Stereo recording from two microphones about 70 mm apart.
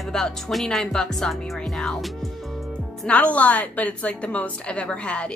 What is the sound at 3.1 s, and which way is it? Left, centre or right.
A woman's voice, centre.